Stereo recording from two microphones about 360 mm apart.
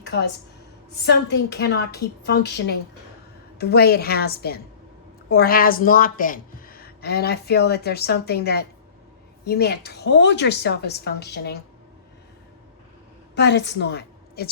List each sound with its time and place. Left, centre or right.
0.0 s a sound: left
1.0 s a woman's voice: left
13.3 s a woman's voice: left